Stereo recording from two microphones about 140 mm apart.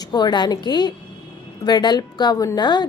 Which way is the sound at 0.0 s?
30° left (ahead or behind).